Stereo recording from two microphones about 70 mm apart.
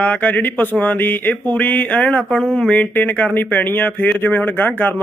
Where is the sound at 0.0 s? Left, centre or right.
Left.